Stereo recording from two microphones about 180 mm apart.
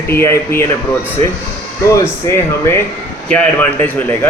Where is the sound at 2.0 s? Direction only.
15° left (ahead or behind).